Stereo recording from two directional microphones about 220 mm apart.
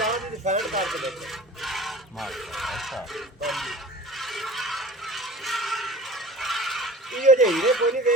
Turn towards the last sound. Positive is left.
turn(degrees=0)  # may be behind; listen again after turning